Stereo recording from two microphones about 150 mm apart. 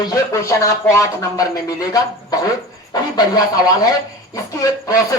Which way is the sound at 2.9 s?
25° left (ahead or behind).